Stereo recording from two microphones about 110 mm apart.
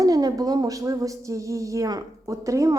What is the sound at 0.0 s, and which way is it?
Speech, 35° right (ahead or behind).